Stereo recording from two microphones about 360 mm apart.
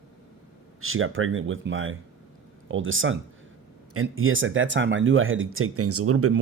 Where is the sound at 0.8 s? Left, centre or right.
Right.